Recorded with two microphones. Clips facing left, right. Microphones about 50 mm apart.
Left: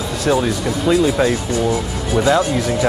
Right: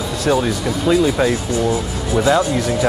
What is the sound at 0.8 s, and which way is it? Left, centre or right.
Speech, centre.